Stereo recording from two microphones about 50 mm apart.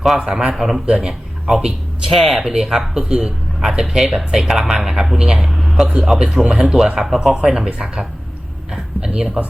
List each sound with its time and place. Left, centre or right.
0.2 s speech: centre
0.5 s speech: centre
0.9 s a man's voice: centre
2.1 s speech: centre
5.5 s a sound: centre
6.1 s speech: centre
8.7 s a sound: centre